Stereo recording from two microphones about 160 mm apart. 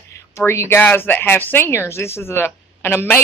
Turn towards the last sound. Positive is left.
turn(degrees=15)  # may be behind; listen again after turning